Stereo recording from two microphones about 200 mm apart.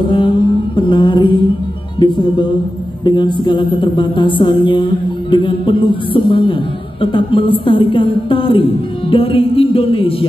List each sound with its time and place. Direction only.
0.0 s mantra: 25° left (ahead or behind)
2.0 s music: 20° left (ahead or behind)